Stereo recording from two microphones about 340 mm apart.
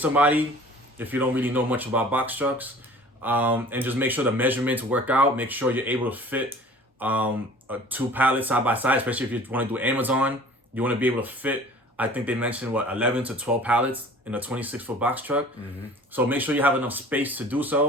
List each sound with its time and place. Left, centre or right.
0.0 s speech: centre